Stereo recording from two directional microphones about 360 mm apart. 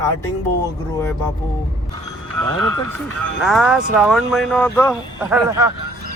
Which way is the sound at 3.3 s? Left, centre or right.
Centre.